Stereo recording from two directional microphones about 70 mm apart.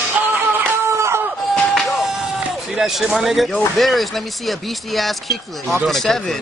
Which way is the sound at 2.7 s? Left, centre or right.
Centre.